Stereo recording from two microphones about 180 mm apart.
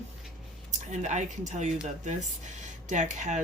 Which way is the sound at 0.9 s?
40° right (ahead or behind).